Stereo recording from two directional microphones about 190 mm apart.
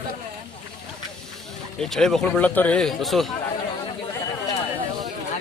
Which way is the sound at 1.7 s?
Centre (ahead or behind).